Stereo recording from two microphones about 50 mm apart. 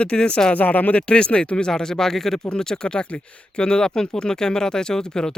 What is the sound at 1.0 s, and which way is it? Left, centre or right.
Speech, left.